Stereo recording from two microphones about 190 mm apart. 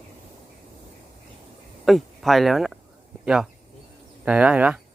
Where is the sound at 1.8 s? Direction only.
Centre (ahead or behind).